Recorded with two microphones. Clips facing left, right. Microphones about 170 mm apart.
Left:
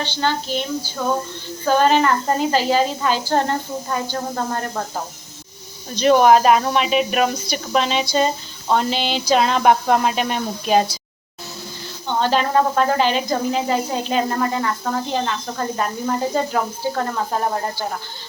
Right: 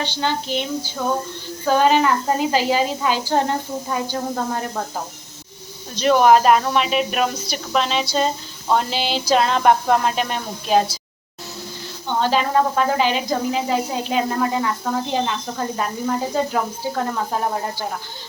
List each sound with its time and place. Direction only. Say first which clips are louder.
0.0 s a woman's voice: left 1 dB; 15° right (ahead or behind)
6.0 s speech: left 1 dB; centre (ahead or behind)
12.0 s speech: left 1 dB; 5° right (ahead or behind)